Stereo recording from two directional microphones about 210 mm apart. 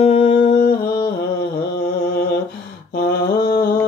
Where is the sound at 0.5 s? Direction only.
45° left (ahead or behind).